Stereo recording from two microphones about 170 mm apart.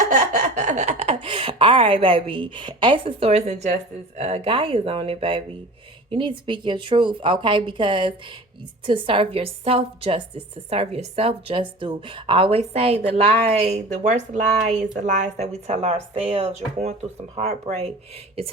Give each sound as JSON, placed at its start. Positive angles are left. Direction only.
{"t": 0.3, "sound": "speech", "side_deg": -45}